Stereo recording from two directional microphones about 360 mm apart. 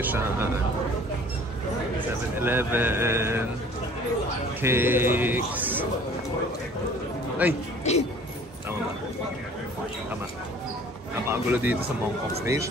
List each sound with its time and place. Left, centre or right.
0.0 s speech: centre
2.3 s speech: centre
4.6 s speech: centre
7.4 s speech: centre
7.9 s speech: centre
11.2 s speech: centre